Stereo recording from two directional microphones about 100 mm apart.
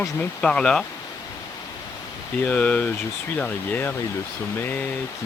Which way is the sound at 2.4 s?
15° left (ahead or behind).